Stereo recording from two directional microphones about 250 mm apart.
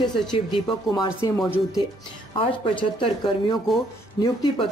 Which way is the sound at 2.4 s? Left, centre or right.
Left.